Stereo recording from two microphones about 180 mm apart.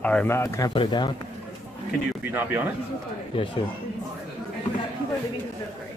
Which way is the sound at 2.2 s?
10° right (ahead or behind).